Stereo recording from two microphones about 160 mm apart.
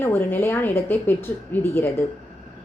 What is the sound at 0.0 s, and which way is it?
A woman's voice, 10° left (ahead or behind).